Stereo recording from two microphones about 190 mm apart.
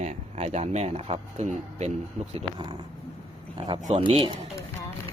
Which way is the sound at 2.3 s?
25° right (ahead or behind).